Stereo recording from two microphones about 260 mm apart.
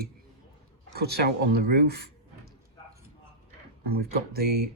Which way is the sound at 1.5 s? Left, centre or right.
Right.